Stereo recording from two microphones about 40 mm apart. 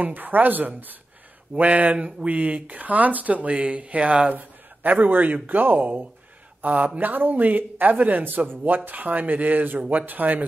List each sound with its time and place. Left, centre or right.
0.0 s speech: right
1.6 s speech: right
4.3 s a sound: right
5.0 s speech: right